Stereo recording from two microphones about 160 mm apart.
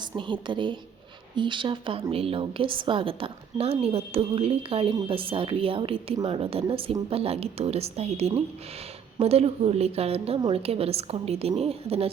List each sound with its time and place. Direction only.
0.2 s a woman's voice: 30° right (ahead or behind)